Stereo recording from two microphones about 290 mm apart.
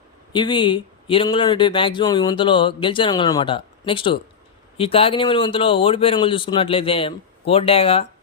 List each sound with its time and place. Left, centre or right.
0.3 s a man's voice: centre